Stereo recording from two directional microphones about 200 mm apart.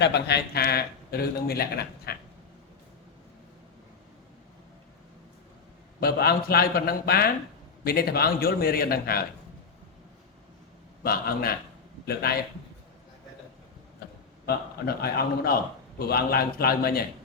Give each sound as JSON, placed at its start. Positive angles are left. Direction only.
{"t": 0.0, "sound": "speech", "side_deg": 55}
{"t": 6.0, "sound": "speech", "side_deg": 50}
{"t": 11.0, "sound": "speech", "side_deg": 50}
{"t": 14.4, "sound": "speech", "side_deg": 50}